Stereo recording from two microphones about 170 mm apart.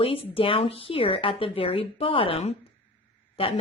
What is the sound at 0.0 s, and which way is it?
Speech, 35° left (ahead or behind).